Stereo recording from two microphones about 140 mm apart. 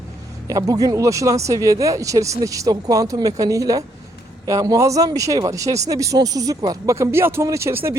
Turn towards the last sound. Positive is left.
turn(degrees=-20)  # may be behind; listen again after turning